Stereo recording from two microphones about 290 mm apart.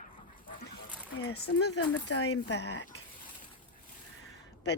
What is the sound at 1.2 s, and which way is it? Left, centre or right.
Speech, left.